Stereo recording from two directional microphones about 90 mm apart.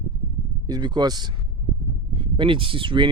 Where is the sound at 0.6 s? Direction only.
50° right (ahead or behind).